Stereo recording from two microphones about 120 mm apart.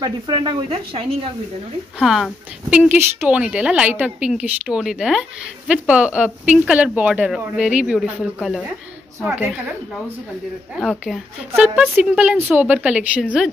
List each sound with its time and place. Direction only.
0.0 s speech: 40° right (ahead or behind)
2.0 s speech: centre (ahead or behind)
2.9 s speech: 20° right (ahead or behind)
3.3 s a woman's voice: 10° right (ahead or behind)
9.2 s a woman's voice: 15° right (ahead or behind)
10.8 s speech: centre (ahead or behind)
11.5 s a woman's voice: 10° right (ahead or behind)